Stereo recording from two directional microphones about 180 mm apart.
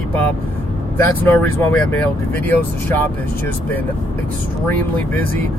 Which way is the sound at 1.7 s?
10° left (ahead or behind).